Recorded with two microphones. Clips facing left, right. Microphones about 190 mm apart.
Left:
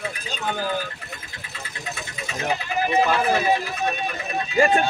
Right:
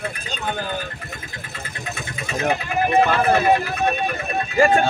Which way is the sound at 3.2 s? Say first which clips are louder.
Right 4 dB; 60° right (ahead or behind).